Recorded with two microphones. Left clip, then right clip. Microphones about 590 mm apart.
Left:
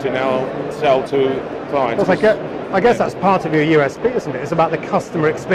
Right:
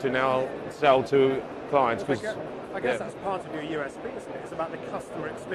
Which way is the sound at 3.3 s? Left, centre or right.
Left.